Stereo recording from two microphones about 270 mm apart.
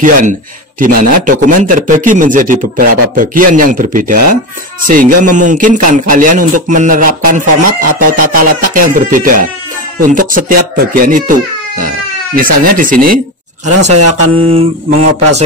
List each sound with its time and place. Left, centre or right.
0.0 s a man's voice: right
12.4 s a man's voice: right